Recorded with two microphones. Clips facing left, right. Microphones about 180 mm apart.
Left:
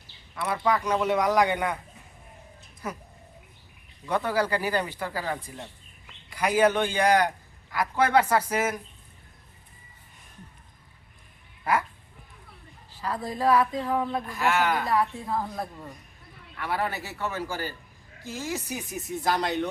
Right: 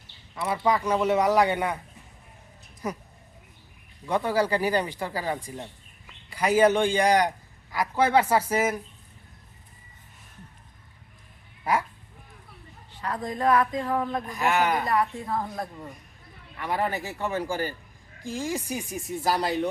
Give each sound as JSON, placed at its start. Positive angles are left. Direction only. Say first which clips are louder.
{"t": 0.3, "sound": "speech", "louder": "right 1 dB", "side_deg": -10}
{"t": 4.0, "sound": "speech", "louder": "right 2 dB", "side_deg": -10}
{"t": 11.6, "sound": "speech", "louder": "even", "side_deg": -10}
{"t": 13.0, "sound": "speech", "louder": "even", "side_deg": 5}
{"t": 16.6, "sound": "speech", "louder": "right 2 dB", "side_deg": -15}